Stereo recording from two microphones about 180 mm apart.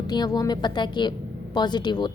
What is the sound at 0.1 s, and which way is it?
A woman's voice, 20° left (ahead or behind).